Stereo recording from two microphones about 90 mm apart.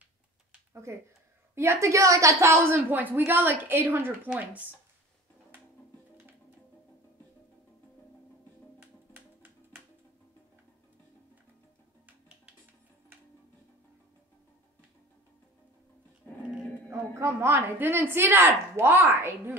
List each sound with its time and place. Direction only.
0.9 s a woman's voice: 30° right (ahead or behind)
2.5 s a woman's voice: 25° right (ahead or behind)
9.1 s music: 25° right (ahead or behind)
16.9 s a woman's voice: 30° right (ahead or behind)